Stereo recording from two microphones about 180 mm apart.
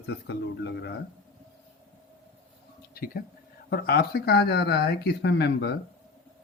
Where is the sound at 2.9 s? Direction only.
50° left (ahead or behind); by 5.8 s 65° left (ahead or behind).